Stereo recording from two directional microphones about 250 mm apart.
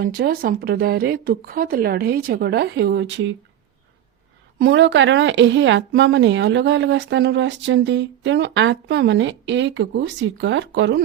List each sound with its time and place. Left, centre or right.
0.0 s speech: right
4.6 s speech: right